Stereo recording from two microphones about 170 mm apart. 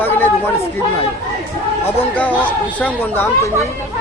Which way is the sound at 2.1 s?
10° left (ahead or behind).